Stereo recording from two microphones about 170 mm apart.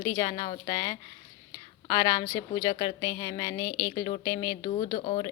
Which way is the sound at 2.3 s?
20° left (ahead or behind).